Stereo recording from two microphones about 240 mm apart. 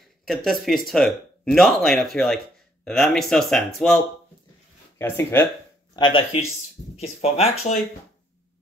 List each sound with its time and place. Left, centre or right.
0.3 s speech: centre
5.9 s speech: left